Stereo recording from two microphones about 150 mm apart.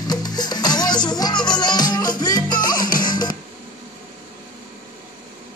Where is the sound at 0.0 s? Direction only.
25° left (ahead or behind).